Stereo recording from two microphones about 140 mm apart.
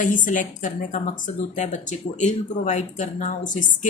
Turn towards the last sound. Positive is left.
turn(degrees=65)  # may be behind; listen again after turning